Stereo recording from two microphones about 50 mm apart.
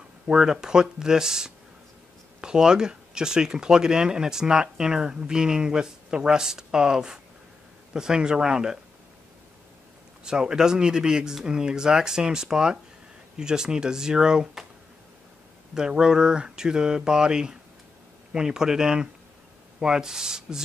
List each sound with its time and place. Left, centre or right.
0.3 s speech: centre
10.2 s speech: centre
15.7 s speech: centre